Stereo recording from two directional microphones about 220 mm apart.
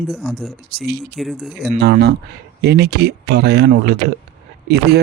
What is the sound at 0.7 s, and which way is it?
Speech, 45° right (ahead or behind).